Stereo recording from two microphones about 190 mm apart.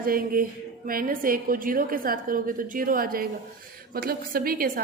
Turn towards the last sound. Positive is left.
turn(degrees=-50)  # may be behind; listen again after turning